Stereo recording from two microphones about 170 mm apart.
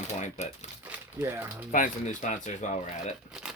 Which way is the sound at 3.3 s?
5° right (ahead or behind).